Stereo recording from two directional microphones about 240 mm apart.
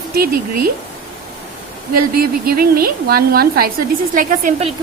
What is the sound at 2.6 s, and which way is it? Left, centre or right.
A woman's voice, right.